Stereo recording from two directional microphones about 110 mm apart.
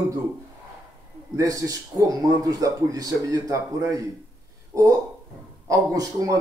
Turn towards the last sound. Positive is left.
turn(degrees=-35)  # may be behind; listen again after turning